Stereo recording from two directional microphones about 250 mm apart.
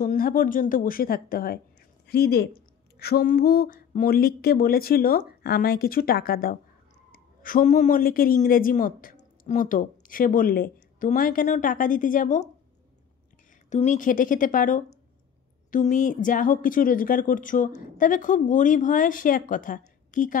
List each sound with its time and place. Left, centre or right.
0.0 s a woman's voice: left
13.7 s speech: left